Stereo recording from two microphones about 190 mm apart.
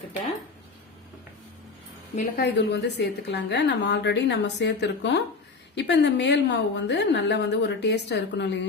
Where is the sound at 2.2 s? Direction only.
55° left (ahead or behind).